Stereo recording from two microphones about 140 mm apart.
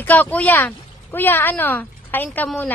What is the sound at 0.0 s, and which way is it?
Speech, 15° left (ahead or behind).